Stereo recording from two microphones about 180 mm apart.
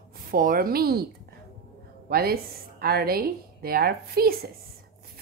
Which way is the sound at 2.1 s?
55° right (ahead or behind).